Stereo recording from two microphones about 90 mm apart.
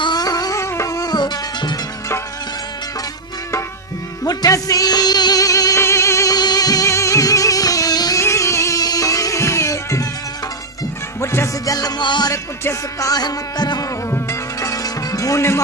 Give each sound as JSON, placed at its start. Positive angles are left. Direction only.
{"t": 0.0, "sound": "music", "side_deg": 50}
{"t": 4.2, "sound": "music", "side_deg": 40}
{"t": 6.3, "sound": "music", "side_deg": 50}
{"t": 8.2, "sound": "music", "side_deg": 35}
{"t": 11.2, "sound": "music", "side_deg": 30}
{"t": 12.3, "sound": "music", "side_deg": 40}
{"t": 14.1, "sound": "music", "side_deg": 35}